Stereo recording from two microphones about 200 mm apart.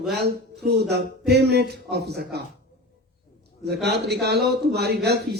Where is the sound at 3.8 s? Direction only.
55° right (ahead or behind).